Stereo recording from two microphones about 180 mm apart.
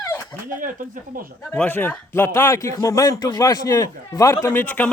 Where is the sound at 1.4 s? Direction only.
10° left (ahead or behind).